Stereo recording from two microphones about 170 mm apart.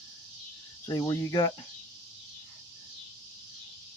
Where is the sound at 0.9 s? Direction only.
25° left (ahead or behind).